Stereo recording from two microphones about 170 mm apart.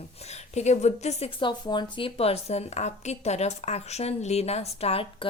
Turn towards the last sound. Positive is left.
turn(degrees=35)  # may be behind; listen again after turning